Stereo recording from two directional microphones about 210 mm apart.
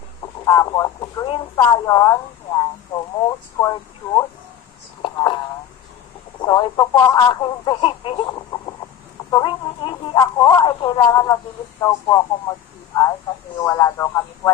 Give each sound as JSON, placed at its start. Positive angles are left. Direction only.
{"t": 0.4, "sound": "speech", "side_deg": 15}
{"t": 5.0, "sound": "a sound", "side_deg": 20}
{"t": 6.4, "sound": "speech", "side_deg": 20}